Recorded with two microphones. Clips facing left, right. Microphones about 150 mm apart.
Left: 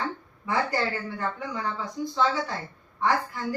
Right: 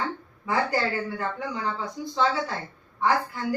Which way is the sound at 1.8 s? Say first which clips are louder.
Even; 10° right (ahead or behind).